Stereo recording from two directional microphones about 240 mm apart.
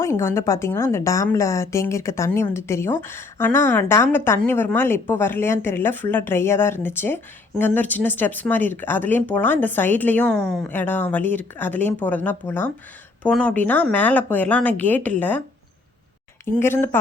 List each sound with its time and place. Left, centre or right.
0.0 s speech: centre
16.6 s speech: centre